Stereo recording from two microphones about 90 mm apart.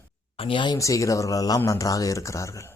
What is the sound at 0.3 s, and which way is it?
Speech, 80° left.